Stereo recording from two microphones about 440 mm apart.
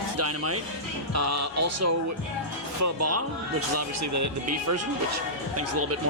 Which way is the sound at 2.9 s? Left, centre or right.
Right.